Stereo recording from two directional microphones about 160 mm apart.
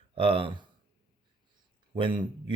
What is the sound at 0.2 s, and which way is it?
Speech, 35° right (ahead or behind).